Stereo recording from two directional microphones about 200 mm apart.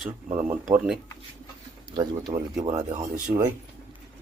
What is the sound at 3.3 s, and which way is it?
Speech, 30° right (ahead or behind).